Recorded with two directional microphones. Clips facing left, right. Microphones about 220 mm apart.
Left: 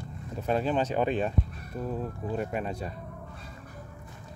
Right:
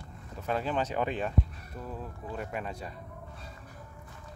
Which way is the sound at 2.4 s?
25° left (ahead or behind).